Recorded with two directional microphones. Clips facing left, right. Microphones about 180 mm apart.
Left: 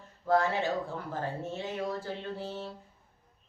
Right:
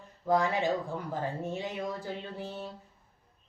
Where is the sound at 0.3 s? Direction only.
15° right (ahead or behind).